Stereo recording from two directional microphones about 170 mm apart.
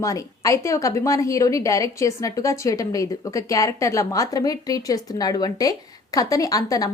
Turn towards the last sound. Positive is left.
turn(degrees=20)  # may be behind; listen again after turning